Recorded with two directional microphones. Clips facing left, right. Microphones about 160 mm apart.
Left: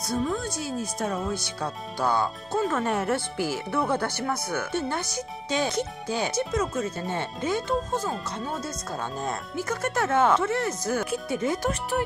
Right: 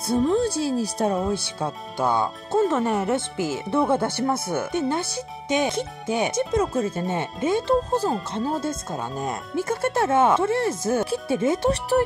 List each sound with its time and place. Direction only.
0.0 s speech: 30° right (ahead or behind)
2.8 s speech: 10° right (ahead or behind)
9.0 s speech: 10° right (ahead or behind)
9.6 s speech: 25° right (ahead or behind)